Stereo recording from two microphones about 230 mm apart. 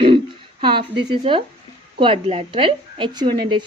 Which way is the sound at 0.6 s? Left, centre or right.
Right.